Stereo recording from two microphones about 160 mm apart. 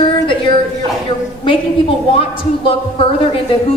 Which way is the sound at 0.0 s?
30° left (ahead or behind).